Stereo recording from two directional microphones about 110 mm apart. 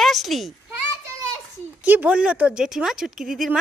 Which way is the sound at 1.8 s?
15° right (ahead or behind).